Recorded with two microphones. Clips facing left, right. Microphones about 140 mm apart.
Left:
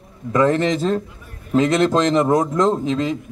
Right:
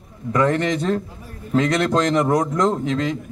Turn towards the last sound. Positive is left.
turn(degrees=25)  # may be behind; listen again after turning